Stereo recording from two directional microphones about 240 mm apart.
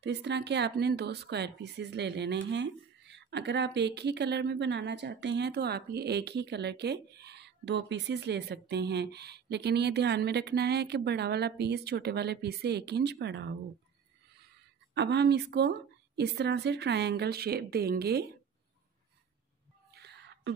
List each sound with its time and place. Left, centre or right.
0.0 s speech: right
15.0 s speech: right
19.9 s a sound: right